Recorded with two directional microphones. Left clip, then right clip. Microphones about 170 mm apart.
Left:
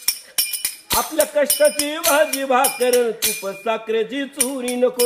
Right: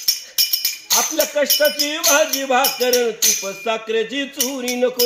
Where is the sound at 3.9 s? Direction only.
30° left (ahead or behind).